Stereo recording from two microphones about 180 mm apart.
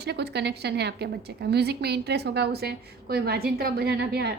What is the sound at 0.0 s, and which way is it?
A woman's voice, 65° right (ahead or behind).